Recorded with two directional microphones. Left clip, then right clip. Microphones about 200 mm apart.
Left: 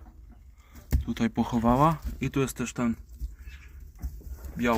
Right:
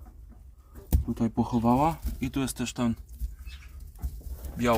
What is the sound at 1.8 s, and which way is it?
Speech, 5° left (ahead or behind).